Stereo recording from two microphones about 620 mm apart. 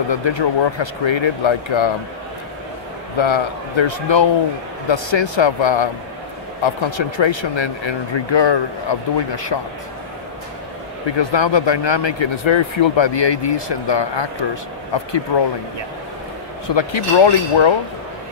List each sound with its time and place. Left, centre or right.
0.1 s speech: left
3.2 s speech: left
11.1 s speech: left
16.6 s speech: left